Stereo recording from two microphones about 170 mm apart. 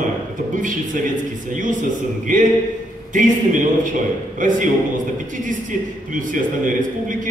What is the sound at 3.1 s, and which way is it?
Speech, 50° right (ahead or behind).